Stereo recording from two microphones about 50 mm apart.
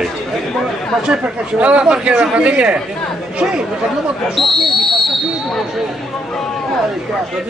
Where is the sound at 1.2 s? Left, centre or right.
Right.